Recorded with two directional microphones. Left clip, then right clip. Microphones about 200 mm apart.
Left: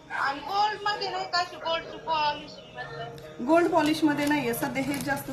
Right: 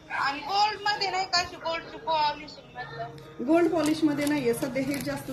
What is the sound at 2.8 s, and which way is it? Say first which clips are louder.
Speech: right 1 dB; 20° right (ahead or behind).